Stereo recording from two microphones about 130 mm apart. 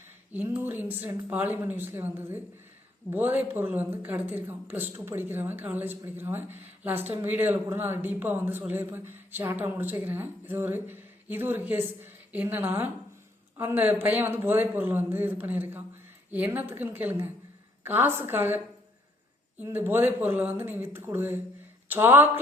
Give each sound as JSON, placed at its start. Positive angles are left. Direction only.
{"t": 0.3, "sound": "speech", "side_deg": -15}
{"t": 19.6, "sound": "speech", "side_deg": -15}